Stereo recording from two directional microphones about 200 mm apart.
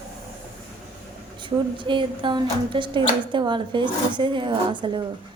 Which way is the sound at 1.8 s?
25° right (ahead or behind).